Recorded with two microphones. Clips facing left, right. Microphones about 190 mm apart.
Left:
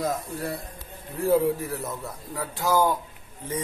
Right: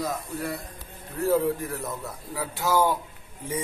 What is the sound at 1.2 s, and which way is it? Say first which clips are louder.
A man's voice: left 2 dB; 10° left (ahead or behind).